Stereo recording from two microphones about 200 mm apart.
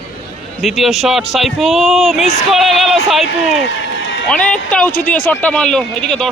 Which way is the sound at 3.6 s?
70° left (ahead or behind).